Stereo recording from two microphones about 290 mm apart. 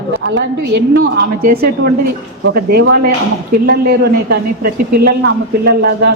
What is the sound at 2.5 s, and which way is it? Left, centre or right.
Speech, right.